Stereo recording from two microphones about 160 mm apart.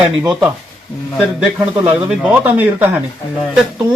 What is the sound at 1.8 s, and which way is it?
A man's voice, 10° right (ahead or behind).